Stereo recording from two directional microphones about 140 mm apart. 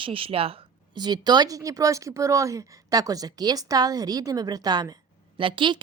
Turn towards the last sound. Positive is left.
turn(degrees=-35)  # may be behind; listen again after turning